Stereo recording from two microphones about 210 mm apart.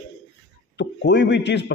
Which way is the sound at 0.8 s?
55° left (ahead or behind).